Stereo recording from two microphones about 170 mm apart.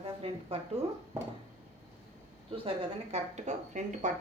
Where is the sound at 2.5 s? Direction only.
35° right (ahead or behind).